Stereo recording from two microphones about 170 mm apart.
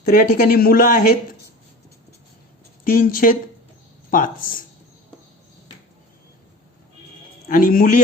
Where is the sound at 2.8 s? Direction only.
55° left (ahead or behind).